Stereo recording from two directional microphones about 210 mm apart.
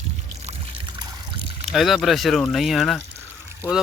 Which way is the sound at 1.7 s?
Centre (ahead or behind).